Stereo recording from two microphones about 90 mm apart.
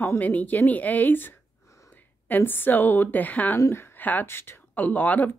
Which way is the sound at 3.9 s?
20° left (ahead or behind).